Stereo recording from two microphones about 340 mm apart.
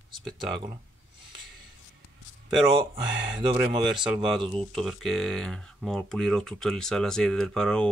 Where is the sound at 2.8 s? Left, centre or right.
Centre.